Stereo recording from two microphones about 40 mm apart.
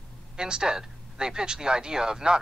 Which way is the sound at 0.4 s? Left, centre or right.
Centre.